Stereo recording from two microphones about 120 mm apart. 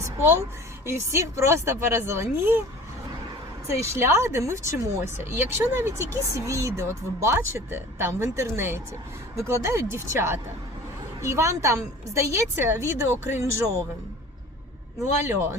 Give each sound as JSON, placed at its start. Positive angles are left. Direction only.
{"t": 0.0, "sound": "a sound", "side_deg": -20}
{"t": 0.9, "sound": "speech", "side_deg": -25}
{"t": 3.8, "sound": "speech", "side_deg": -25}
{"t": 15.3, "sound": "speech", "side_deg": -20}